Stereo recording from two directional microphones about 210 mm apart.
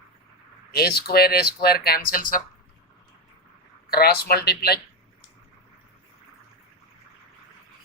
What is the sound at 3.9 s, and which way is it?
Speech, 45° left (ahead or behind).